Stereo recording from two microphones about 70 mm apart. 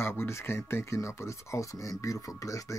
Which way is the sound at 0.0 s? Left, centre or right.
Left.